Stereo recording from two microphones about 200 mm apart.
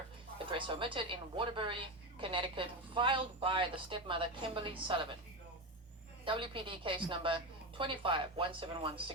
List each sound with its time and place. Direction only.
0.3 s a woman's voice: 25° right (ahead or behind)
6.2 s speech: 25° right (ahead or behind)